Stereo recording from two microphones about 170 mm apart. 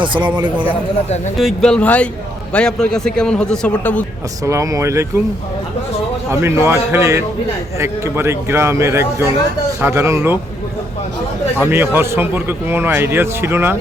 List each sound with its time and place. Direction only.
0.0 s a man's voice: 30° right (ahead or behind)
1.4 s a man's voice: 5° left (ahead or behind)
4.4 s a man's voice: 20° right (ahead or behind)
6.3 s a man's voice: 15° right (ahead or behind)
11.6 s a man's voice: 10° right (ahead or behind)